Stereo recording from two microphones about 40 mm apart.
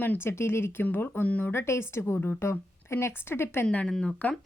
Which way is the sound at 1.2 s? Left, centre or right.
Left.